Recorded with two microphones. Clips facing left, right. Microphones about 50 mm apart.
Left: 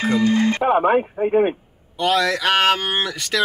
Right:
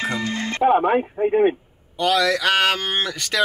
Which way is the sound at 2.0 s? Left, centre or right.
Left.